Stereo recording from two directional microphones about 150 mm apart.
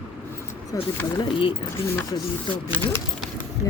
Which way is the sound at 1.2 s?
35° left (ahead or behind).